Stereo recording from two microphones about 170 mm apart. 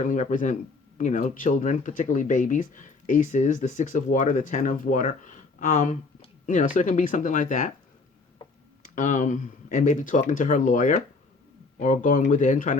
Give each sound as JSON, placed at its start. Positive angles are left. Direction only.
{"t": 0.0, "sound": "speech", "side_deg": 50}
{"t": 8.8, "sound": "speech", "side_deg": 50}